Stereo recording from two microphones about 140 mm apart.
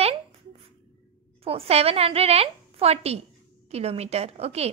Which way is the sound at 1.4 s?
45° right (ahead or behind).